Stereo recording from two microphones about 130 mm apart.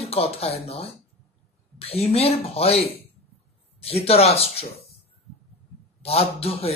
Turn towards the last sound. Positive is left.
turn(degrees=50)  # may be behind; listen again after turning